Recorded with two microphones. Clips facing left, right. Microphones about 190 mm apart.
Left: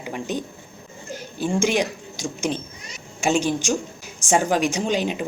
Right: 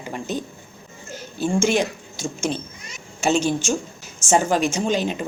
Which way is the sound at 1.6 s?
15° left (ahead or behind).